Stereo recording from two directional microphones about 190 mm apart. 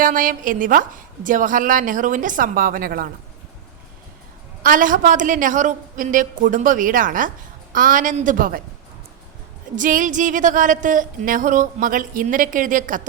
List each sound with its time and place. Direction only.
0.0 s speech: 45° right (ahead or behind)
4.6 s speech: 45° right (ahead or behind)
9.7 s speech: 45° right (ahead or behind)